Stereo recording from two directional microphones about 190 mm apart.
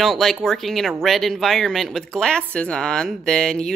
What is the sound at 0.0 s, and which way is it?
Speech, centre (ahead or behind).